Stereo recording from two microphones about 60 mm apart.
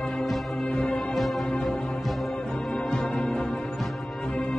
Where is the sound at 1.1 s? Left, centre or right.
Centre.